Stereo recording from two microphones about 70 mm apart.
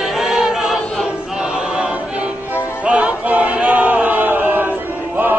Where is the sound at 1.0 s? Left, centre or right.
Centre.